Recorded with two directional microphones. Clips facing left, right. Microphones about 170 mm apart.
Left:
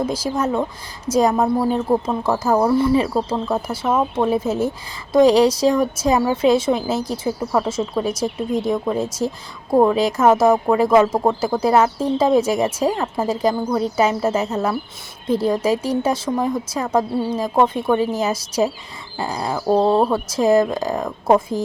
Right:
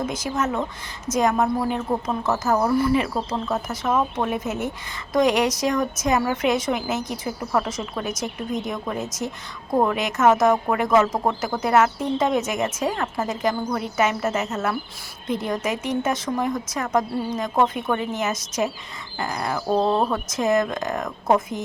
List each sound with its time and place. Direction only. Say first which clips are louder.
0.0 s speech: left 4 dB; 30° left (ahead or behind)